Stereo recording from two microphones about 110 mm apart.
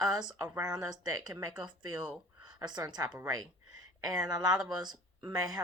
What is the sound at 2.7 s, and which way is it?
Speech, 40° right (ahead or behind).